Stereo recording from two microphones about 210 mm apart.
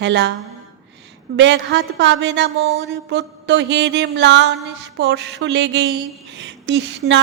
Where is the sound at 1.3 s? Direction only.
55° right (ahead or behind).